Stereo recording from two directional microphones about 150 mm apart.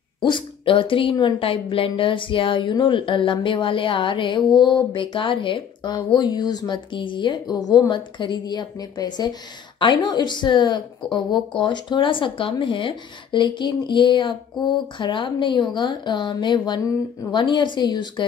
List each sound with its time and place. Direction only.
0.2 s a woman's voice: 35° left (ahead or behind)